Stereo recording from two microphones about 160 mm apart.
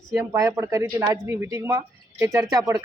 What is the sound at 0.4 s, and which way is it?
Speech, 20° right (ahead or behind).